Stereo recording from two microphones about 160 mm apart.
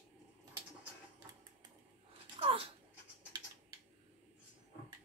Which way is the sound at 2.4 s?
35° right (ahead or behind).